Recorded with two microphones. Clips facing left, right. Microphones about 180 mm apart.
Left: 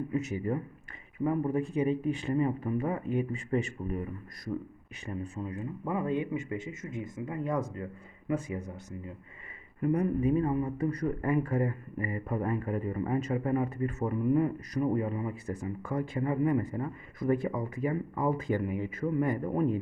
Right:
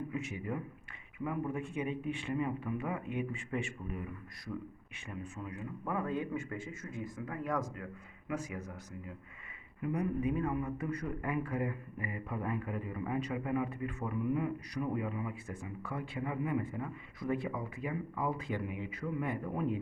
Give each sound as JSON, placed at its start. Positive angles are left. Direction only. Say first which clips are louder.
{"t": 0.1, "sound": "a man's voice", "louder": "left 7 dB", "side_deg": 40}
{"t": 9.8, "sound": "a man's voice", "louder": "left 6 dB", "side_deg": 45}